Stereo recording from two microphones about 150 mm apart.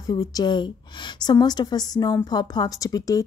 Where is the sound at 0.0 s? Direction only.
25° left (ahead or behind).